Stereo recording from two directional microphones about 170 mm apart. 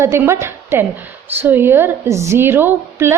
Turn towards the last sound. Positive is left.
turn(degrees=-15)  # may be behind; listen again after turning